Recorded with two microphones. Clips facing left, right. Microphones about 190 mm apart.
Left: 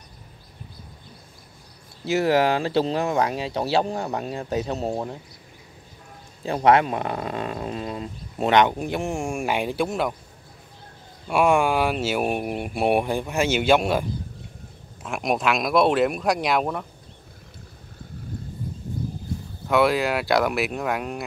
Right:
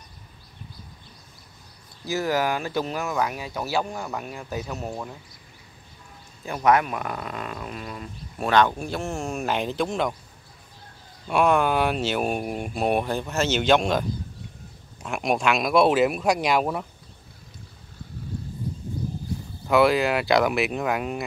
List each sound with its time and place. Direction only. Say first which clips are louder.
2.2 s speech: left 5 dB; 25° left (ahead or behind)
6.4 s speech: left 3 dB; 30° left (ahead or behind); by 10.1 s 5° left (ahead or behind)
11.2 s speech: left 1 dB; 5° left (ahead or behind)
15.0 s speech: even; centre (ahead or behind)
19.7 s speech: right 1 dB; centre (ahead or behind)